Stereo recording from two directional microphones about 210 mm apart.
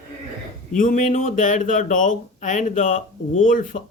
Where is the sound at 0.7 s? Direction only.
40° left (ahead or behind).